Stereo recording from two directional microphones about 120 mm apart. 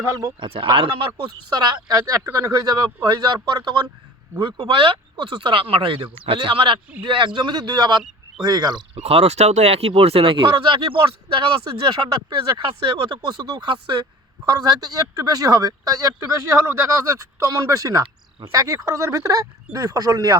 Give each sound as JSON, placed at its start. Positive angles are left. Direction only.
{"t": 0.1, "sound": "speech", "side_deg": -30}
{"t": 0.4, "sound": "speech", "side_deg": -50}
{"t": 1.5, "sound": "a man's voice", "side_deg": -35}
{"t": 9.0, "sound": "speech", "side_deg": -60}
{"t": 12.8, "sound": "a man's voice", "side_deg": -40}